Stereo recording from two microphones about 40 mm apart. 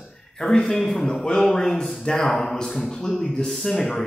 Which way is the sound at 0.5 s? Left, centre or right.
Centre.